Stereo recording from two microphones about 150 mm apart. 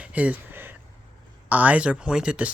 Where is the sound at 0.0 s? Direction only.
10° right (ahead or behind).